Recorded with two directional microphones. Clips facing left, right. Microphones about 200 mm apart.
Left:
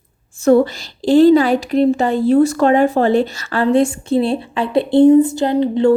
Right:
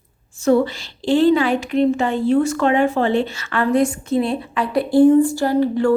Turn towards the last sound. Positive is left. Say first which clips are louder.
# left 3 dB
turn(degrees=20)  # may be behind; listen again after turning